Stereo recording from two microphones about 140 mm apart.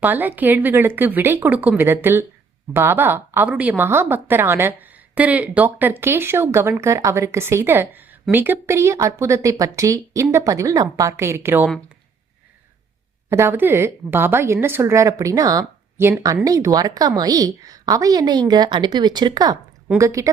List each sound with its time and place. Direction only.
0.0 s a woman's voice: 15° right (ahead or behind)
13.3 s a woman's voice: 15° right (ahead or behind)